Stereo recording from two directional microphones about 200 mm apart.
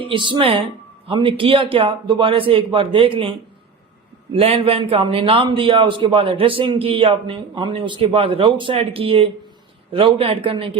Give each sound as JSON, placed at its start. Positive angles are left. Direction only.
{"t": 0.0, "sound": "a man's voice", "side_deg": -25}
{"t": 4.4, "sound": "a man's voice", "side_deg": -25}